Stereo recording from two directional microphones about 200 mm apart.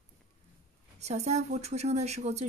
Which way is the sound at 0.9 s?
35° right (ahead or behind).